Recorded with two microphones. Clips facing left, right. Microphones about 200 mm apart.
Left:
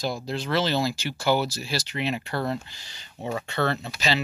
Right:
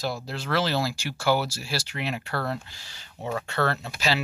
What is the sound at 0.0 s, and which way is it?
Speech, 5° right (ahead or behind).